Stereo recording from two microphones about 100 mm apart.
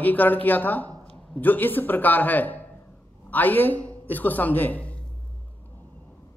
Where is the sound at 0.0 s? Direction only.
15° left (ahead or behind).